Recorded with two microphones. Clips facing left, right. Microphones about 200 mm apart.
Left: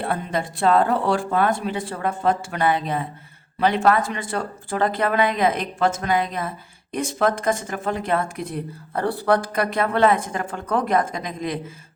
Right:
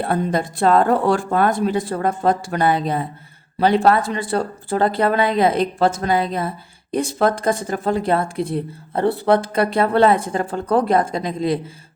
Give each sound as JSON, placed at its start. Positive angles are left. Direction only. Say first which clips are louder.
{"t": 0.0, "sound": "speech", "louder": "right 5 dB", "side_deg": -40}